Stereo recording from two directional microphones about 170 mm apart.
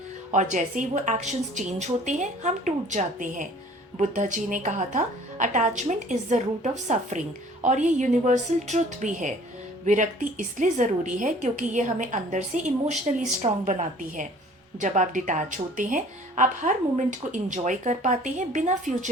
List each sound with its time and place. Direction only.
0.3 s a woman's voice: 45° right (ahead or behind)